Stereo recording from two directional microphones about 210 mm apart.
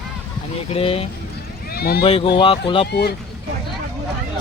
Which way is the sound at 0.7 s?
30° left (ahead or behind).